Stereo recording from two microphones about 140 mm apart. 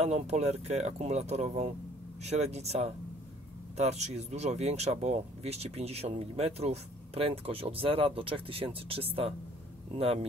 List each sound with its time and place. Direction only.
0.0 s speech: 55° right (ahead or behind)